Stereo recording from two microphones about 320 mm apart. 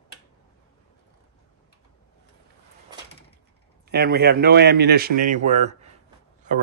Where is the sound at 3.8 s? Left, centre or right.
Right.